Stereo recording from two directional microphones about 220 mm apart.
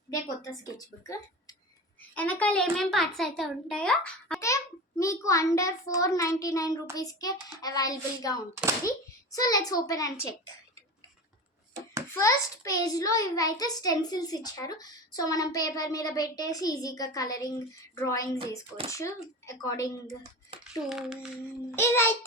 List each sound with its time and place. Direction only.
0.1 s a child's voice: 15° left (ahead or behind)
12.2 s a child's voice: 15° left (ahead or behind)
20.9 s a child's voice: centre (ahead or behind)
21.8 s a child's voice: 10° left (ahead or behind)